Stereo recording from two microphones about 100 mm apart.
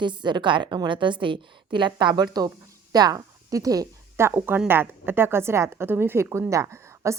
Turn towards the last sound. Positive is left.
turn(degrees=-30)  # may be behind; listen again after turning